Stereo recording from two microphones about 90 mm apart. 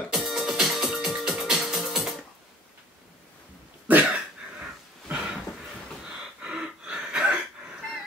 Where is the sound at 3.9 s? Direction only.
15° right (ahead or behind).